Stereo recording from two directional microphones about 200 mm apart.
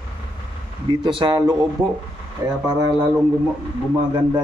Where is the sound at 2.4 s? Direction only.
10° right (ahead or behind).